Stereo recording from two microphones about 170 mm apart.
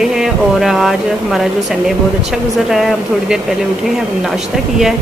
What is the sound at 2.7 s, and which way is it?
Speech, centre (ahead or behind).